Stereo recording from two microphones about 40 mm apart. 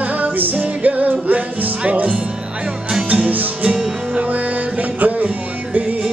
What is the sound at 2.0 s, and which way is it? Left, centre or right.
Music, right.